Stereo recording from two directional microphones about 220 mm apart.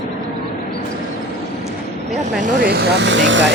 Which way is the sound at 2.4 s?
45° right (ahead or behind).